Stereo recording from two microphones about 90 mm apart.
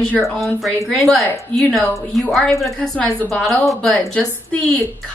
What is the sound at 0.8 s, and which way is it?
A woman's voice, 5° left (ahead or behind).